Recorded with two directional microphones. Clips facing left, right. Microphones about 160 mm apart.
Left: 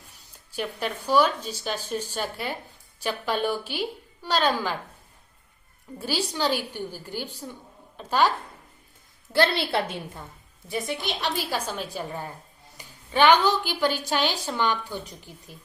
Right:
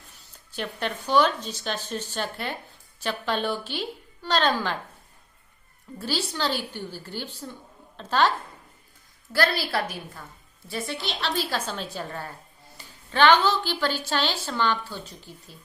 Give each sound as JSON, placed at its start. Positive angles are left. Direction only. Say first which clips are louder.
{"t": 0.3, "sound": "a woman's voice", "louder": "left 1 dB", "side_deg": 10}
{"t": 6.0, "sound": "a woman's voice", "louder": "left 2 dB", "side_deg": 15}
{"t": 9.3, "sound": "a woman's voice", "louder": "left 2 dB", "side_deg": 25}